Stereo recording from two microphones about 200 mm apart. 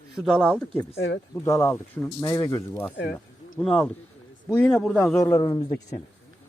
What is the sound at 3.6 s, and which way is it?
A man's voice, 5° left (ahead or behind).